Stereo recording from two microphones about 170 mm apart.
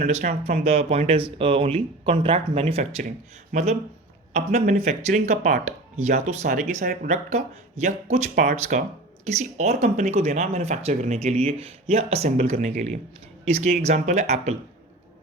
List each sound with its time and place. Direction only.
0.4 s speech: 40° right (ahead or behind)